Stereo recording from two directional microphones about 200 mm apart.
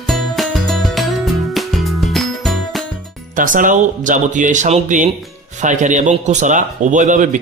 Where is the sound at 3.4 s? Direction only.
40° right (ahead or behind).